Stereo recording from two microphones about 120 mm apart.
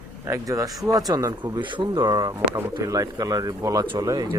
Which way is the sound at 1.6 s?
40° right (ahead or behind).